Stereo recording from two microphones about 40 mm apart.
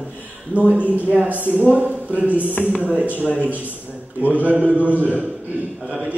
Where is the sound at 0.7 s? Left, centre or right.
Right.